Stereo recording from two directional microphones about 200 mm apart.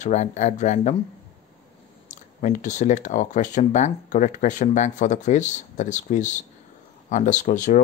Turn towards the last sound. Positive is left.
turn(degrees=40)  # may be behind; listen again after turning